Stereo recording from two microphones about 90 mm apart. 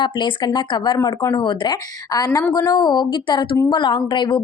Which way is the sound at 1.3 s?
60° left (ahead or behind).